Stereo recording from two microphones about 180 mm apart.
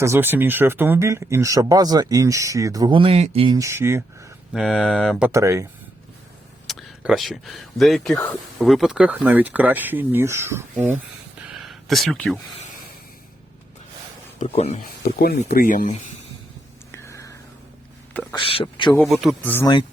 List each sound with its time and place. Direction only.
0.0 s speech: 15° right (ahead or behind); by 3.6 s 30° right (ahead or behind)
3.6 s speech: 15° right (ahead or behind)
4.5 s speech: centre (ahead or behind)
5.3 s speech: 15° right (ahead or behind)
6.7 s speech: centre (ahead or behind)
11.3 s a sound: centre (ahead or behind)
14.3 s speech: 35° left (ahead or behind)
15.0 s speech: 60° left (ahead or behind)
16.9 s a sound: 15° left (ahead or behind)
18.3 s a man's voice: 30° left (ahead or behind)
18.9 s speech: centre (ahead or behind)
19.5 s speech: 10° left (ahead or behind)